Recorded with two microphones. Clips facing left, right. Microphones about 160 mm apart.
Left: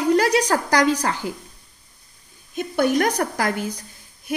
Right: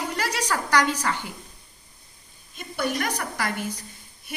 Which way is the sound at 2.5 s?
50° left (ahead or behind).